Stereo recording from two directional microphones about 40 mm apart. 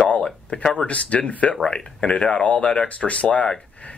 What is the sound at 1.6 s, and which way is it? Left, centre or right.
Speech, left.